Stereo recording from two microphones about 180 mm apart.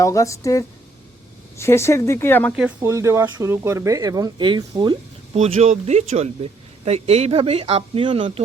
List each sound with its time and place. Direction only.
0.0 s speech: 15° left (ahead or behind)
2.5 s speech: 5° right (ahead or behind); by 8.4 s 30° right (ahead or behind)